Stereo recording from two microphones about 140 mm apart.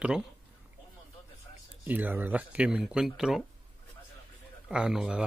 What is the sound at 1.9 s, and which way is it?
Speech, 10° right (ahead or behind).